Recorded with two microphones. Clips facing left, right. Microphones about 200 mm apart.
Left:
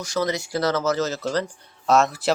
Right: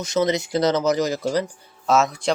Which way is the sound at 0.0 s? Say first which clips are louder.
Right 4 dB; 20° right (ahead or behind).